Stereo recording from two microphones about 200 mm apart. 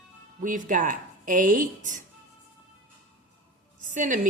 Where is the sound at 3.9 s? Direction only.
40° right (ahead or behind).